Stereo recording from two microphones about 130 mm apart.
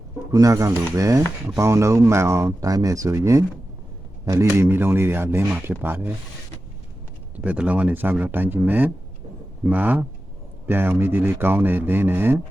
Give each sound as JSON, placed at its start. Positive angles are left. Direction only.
{"t": 0.3, "sound": "speech", "side_deg": -25}
{"t": 7.3, "sound": "speech", "side_deg": -10}